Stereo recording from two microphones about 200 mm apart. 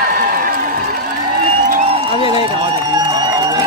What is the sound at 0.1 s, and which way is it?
Crowd, 50° right (ahead or behind).